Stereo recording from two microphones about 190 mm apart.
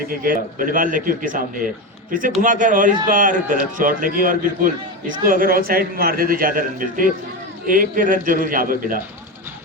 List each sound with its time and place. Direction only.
0.1 s a man's voice: 50° right (ahead or behind)